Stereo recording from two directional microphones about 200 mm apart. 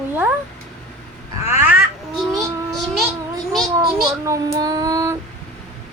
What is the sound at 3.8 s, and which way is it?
Child singing, 15° right (ahead or behind).